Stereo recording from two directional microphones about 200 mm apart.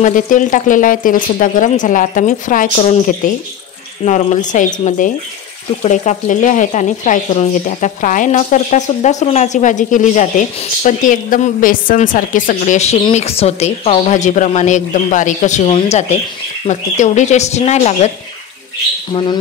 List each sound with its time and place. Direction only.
0.0 s speech: 40° left (ahead or behind)
4.0 s speech: 35° left (ahead or behind)